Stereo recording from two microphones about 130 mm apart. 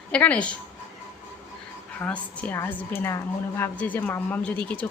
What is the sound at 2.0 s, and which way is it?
A woman's voice, 10° left (ahead or behind).